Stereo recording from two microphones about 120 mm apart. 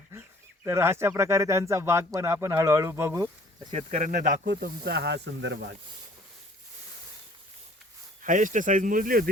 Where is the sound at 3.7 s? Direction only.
75° right (ahead or behind).